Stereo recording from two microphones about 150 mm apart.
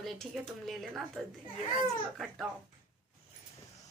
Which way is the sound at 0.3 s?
5° right (ahead or behind).